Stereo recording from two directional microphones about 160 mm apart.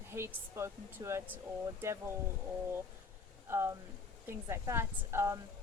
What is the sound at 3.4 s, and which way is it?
Speech, 15° right (ahead or behind).